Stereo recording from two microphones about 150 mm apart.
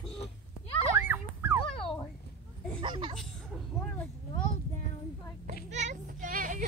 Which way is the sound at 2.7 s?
35° right (ahead or behind).